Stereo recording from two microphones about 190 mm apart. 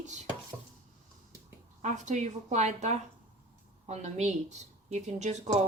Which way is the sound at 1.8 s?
40° right (ahead or behind).